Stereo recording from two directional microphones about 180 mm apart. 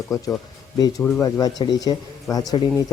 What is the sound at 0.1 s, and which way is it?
Speech, 20° left (ahead or behind).